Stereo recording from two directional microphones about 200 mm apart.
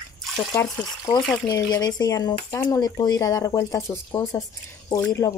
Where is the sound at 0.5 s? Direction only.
15° left (ahead or behind).